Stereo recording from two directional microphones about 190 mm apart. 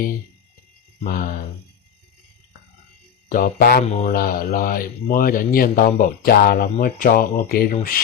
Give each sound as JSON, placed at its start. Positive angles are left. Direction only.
{"t": 1.0, "sound": "speech", "side_deg": 50}
{"t": 3.2, "sound": "speech", "side_deg": 45}
{"t": 3.8, "sound": "speech", "side_deg": 35}
{"t": 4.1, "sound": "speech", "side_deg": 50}